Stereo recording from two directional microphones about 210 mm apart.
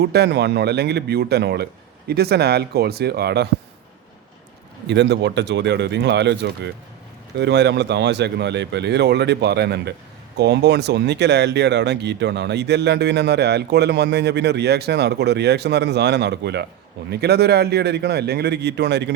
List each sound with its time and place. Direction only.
0.0 s speech: 50° right (ahead or behind)
4.9 s speech: 55° right (ahead or behind)